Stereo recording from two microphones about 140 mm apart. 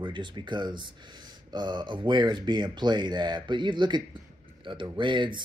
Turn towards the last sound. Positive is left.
turn(degrees=-35)  # may be behind; listen again after turning